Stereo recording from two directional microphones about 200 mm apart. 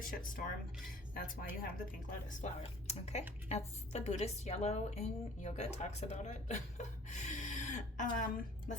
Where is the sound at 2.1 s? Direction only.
35° left (ahead or behind).